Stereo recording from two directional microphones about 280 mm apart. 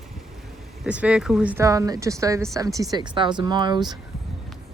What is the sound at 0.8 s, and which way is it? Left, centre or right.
Speech, centre.